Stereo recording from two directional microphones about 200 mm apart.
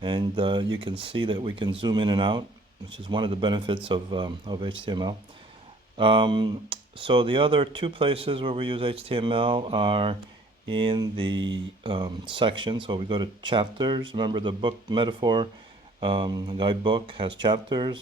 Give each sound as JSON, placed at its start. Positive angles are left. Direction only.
{"t": 0.0, "sound": "speech", "side_deg": -25}